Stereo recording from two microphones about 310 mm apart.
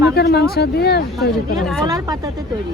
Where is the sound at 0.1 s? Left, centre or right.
Left.